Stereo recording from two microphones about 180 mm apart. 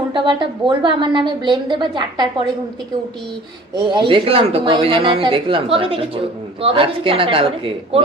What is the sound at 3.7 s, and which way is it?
A woman's voice, 25° right (ahead or behind).